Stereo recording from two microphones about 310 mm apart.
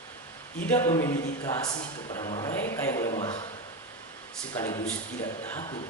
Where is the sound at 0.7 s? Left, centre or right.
Centre.